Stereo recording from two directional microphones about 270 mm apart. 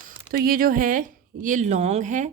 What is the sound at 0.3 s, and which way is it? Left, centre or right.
Speech, right.